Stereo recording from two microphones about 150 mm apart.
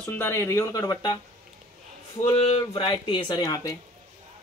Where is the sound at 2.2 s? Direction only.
40° left (ahead or behind); by 3.8 s 25° left (ahead or behind).